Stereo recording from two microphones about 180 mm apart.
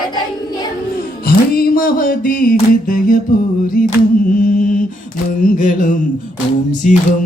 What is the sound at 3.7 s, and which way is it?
Mantra, 50° left (ahead or behind).